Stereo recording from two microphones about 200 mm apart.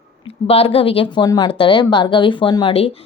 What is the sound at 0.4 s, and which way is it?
Speech, 30° left (ahead or behind).